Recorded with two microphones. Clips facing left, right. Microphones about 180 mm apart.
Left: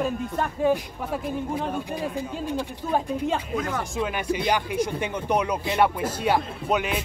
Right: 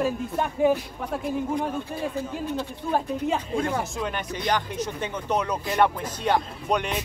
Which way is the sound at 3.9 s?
5° left (ahead or behind).